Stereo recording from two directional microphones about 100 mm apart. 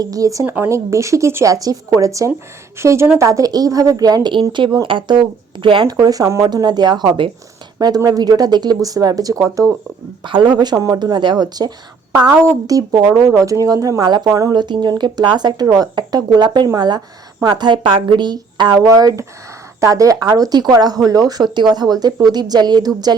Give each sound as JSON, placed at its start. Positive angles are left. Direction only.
{"t": 0.0, "sound": "speech", "side_deg": -35}
{"t": 0.4, "sound": "a woman's voice", "side_deg": -25}
{"t": 5.9, "sound": "speech", "side_deg": -40}
{"t": 6.5, "sound": "speech", "side_deg": -45}
{"t": 10.2, "sound": "speech", "side_deg": -50}
{"t": 12.3, "sound": "a woman's voice", "side_deg": -30}